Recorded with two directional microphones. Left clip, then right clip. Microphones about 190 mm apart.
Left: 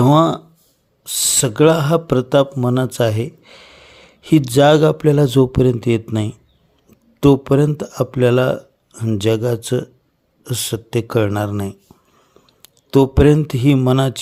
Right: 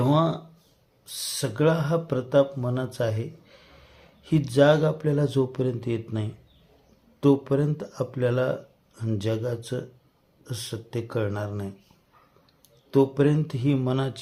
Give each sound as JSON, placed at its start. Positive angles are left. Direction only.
{"t": 0.0, "sound": "speech", "side_deg": 55}
{"t": 12.9, "sound": "speech", "side_deg": 55}